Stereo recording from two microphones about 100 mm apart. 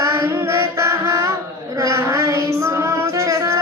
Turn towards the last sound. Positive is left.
turn(degrees=-30)  # may be behind; listen again after turning